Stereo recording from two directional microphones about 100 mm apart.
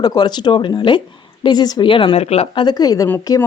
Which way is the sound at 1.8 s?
60° left (ahead or behind).